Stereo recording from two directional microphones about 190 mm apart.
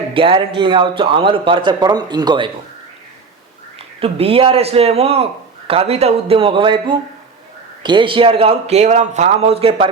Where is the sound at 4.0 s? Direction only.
30° right (ahead or behind).